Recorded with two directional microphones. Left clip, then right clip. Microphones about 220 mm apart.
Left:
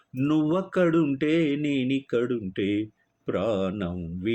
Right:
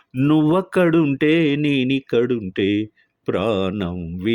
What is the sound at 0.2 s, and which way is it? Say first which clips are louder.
Mantra: right 7 dB; 50° right (ahead or behind).